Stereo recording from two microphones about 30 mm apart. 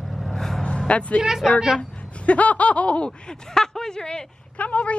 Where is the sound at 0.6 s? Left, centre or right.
Left.